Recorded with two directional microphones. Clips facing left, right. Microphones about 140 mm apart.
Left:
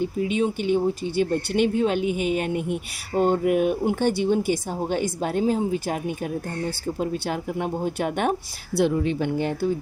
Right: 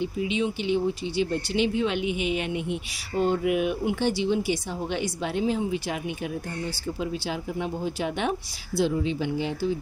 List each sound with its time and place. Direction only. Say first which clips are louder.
0.0 s speech: left 3 dB; 45° left (ahead or behind)